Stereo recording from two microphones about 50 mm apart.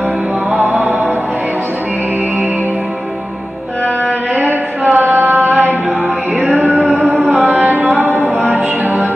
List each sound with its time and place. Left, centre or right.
0.6 s mantra: right
4.9 s a sound: right
6.4 s music: right
7.3 s carnatic music: right
8.2 s music: right